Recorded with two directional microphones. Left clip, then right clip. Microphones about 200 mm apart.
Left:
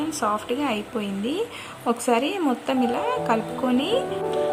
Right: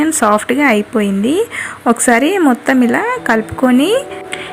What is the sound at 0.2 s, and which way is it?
A woman's voice, 20° right (ahead or behind).